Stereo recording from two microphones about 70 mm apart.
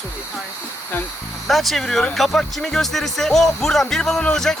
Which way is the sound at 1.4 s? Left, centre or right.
Centre.